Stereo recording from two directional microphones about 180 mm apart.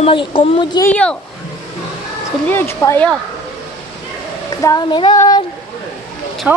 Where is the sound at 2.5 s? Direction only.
10° left (ahead or behind).